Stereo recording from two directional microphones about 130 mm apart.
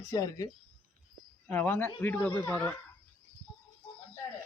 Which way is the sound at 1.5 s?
15° left (ahead or behind).